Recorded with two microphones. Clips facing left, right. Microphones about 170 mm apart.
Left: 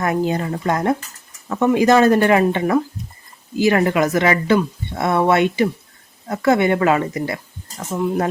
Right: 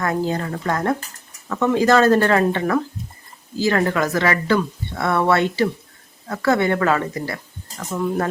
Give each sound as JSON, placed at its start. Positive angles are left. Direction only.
{"t": 0.0, "sound": "speech", "side_deg": 20}